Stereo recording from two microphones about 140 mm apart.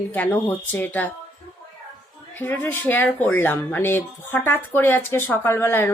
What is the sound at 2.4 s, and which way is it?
Speech, 15° left (ahead or behind).